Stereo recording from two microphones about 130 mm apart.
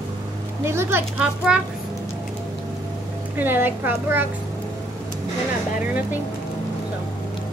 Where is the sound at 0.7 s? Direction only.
20° right (ahead or behind).